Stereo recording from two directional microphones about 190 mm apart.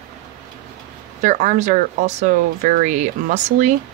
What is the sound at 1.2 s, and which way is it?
Speech, 40° right (ahead or behind).